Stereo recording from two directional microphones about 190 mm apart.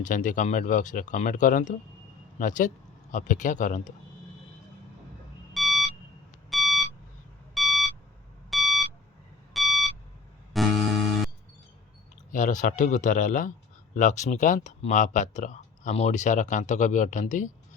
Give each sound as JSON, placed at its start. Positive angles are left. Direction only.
{"t": 0.0, "sound": "speech", "side_deg": 40}
{"t": 5.5, "sound": "beep", "side_deg": 0}
{"t": 7.5, "sound": "a sound", "side_deg": 0}
{"t": 8.4, "sound": "beep", "side_deg": 0}
{"t": 10.5, "sound": "music", "side_deg": 0}
{"t": 12.3, "sound": "speech", "side_deg": 40}